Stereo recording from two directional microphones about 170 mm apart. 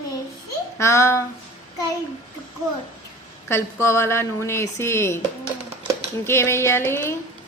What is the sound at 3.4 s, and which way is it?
A woman's voice, 15° left (ahead or behind).